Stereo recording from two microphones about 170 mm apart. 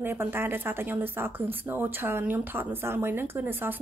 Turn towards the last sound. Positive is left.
turn(degrees=-10)  # may be behind; listen again after turning